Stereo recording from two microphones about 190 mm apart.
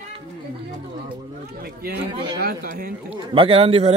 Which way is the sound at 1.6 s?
55° right (ahead or behind).